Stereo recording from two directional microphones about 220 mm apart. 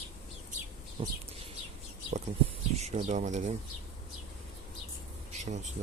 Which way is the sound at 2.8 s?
35° right (ahead or behind).